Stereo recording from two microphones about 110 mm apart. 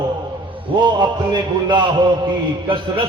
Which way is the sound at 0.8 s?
40° right (ahead or behind).